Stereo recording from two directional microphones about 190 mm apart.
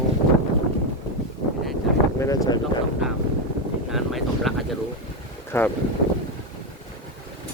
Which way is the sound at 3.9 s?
Centre (ahead or behind).